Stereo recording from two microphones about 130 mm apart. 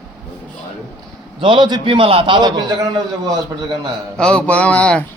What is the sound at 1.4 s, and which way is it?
A man's voice, 40° right (ahead or behind).